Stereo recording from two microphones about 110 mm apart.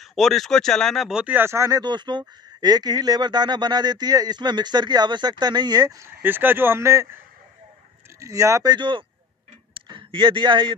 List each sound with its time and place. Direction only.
0.0 s speech: centre (ahead or behind)
1.2 s speech: 20° right (ahead or behind)
1.8 s speech: 40° right (ahead or behind)
6.0 s speech: 20° right (ahead or behind)
8.2 s speech: 30° right (ahead or behind)
8.7 s speech: 50° right (ahead or behind)